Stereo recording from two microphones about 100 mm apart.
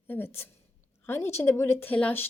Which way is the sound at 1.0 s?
25° left (ahead or behind).